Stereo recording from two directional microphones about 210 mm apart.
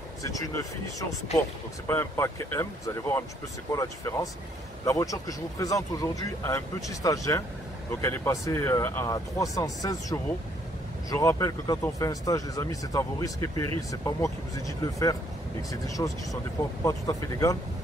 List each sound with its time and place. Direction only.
1.3 s speech: 30° left (ahead or behind)
1.9 s speech: 10° left (ahead or behind)